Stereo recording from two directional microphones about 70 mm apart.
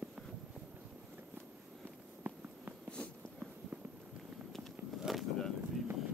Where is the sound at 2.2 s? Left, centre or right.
Right.